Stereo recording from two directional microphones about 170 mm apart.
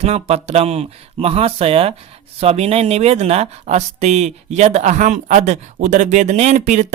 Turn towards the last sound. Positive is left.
turn(degrees=-45)  # may be behind; listen again after turning